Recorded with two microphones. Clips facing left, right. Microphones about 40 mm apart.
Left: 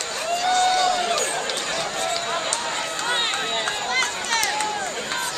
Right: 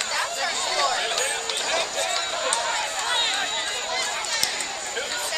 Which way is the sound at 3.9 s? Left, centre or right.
Left.